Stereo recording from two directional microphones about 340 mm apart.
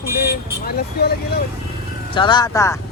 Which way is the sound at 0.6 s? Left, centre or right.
Left.